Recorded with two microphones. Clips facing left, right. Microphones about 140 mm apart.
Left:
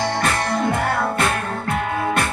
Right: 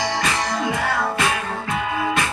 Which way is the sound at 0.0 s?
55° left (ahead or behind).